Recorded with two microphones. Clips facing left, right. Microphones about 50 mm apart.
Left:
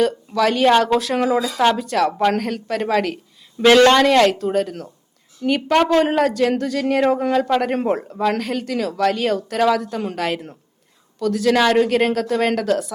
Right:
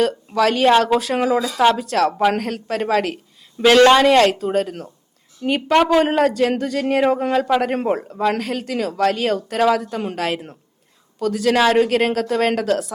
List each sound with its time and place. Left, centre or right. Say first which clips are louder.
0.4 s speech: even; centre
1.9 s speech: right 1 dB; centre
2.1 s speech: even; centre
5.4 s a woman's voice: left 1 dB; right
5.6 s speech: right 1 dB; centre
6.6 s speech: even; right
7.3 s speech: even; centre
9.8 s speech: even; centre